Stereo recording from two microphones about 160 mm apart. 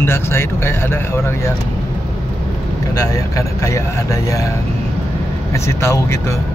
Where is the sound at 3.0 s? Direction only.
20° left (ahead or behind).